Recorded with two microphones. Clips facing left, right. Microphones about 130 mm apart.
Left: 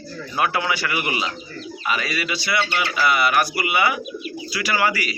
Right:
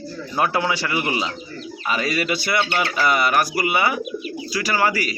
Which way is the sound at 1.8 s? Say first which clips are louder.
Right 3 dB; 40° right (ahead or behind).